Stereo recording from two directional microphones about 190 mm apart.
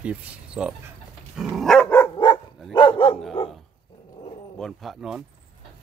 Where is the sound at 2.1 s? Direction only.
25° left (ahead or behind).